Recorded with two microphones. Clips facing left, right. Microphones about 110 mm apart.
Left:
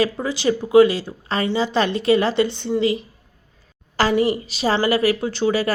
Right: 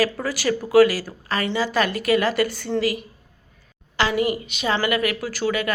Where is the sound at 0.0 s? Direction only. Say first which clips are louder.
Left 2 dB; 20° left (ahead or behind).